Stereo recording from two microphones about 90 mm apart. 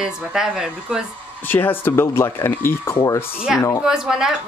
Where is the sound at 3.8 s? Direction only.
5° right (ahead or behind).